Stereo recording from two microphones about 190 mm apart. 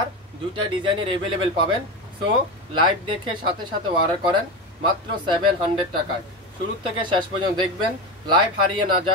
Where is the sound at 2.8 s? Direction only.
25° right (ahead or behind).